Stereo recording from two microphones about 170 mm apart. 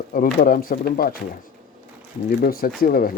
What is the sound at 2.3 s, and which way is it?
Speech, 60° left (ahead or behind).